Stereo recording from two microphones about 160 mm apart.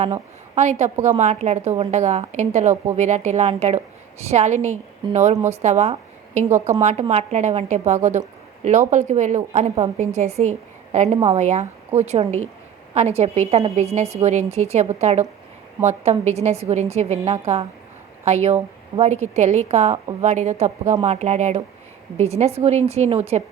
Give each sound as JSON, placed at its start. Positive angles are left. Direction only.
{"t": 0.0, "sound": "a woman's voice", "side_deg": -45}